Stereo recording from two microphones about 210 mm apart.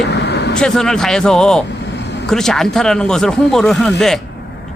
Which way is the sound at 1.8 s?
55° left (ahead or behind).